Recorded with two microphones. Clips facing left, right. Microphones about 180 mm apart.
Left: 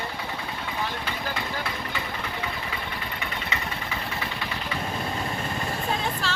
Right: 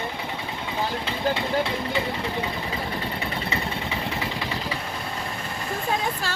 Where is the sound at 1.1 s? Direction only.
25° right (ahead or behind).